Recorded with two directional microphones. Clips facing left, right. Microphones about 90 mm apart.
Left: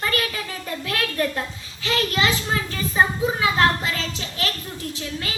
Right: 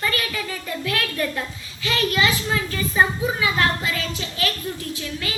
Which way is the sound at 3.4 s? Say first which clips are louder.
Left 3 dB; 30° left (ahead or behind).